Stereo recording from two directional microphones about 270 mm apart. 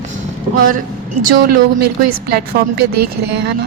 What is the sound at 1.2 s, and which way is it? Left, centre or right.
Speech, right.